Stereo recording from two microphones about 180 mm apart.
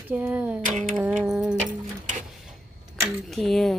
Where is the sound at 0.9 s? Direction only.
5° right (ahead or behind).